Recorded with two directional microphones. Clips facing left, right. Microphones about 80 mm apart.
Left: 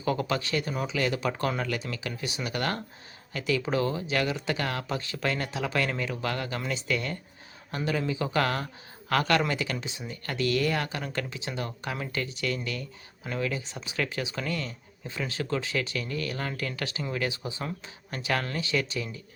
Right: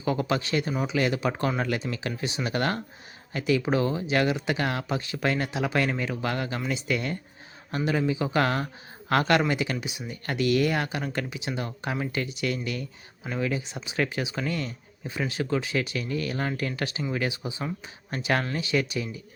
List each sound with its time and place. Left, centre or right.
0.0 s speech: right
17.6 s speech: centre
18.1 s speech: right